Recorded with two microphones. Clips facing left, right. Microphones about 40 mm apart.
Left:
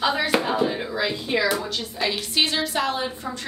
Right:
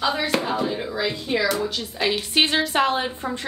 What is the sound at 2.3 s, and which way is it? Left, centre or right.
A woman's voice, right.